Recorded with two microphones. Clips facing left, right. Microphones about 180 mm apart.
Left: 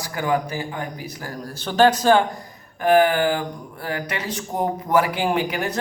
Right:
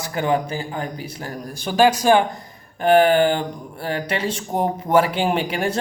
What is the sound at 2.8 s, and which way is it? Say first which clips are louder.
Speech: right 2 dB; 30° right (ahead or behind).